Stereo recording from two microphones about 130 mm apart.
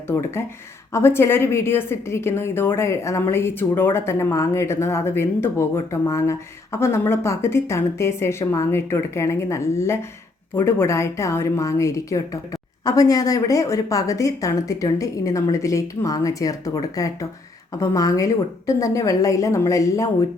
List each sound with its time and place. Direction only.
0.1 s a woman's voice: 20° left (ahead or behind)